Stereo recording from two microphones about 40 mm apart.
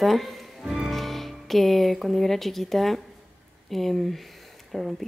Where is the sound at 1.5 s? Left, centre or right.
Centre.